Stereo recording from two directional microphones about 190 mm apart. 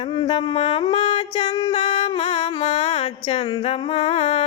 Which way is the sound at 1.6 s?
35° left (ahead or behind).